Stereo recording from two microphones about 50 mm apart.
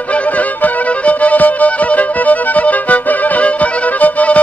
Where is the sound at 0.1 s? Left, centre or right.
Left.